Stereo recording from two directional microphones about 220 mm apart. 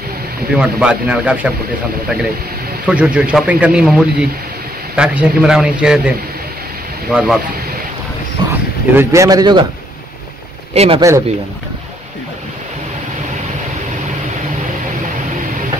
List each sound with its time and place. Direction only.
0.6 s a man's voice: 5° right (ahead or behind)
2.9 s a man's voice: 5° right (ahead or behind)
8.4 s a sound: 20° right (ahead or behind)
8.9 s a man's voice: 15° right (ahead or behind)
10.7 s speech: 25° right (ahead or behind)
11.0 s a man's voice: 15° right (ahead or behind)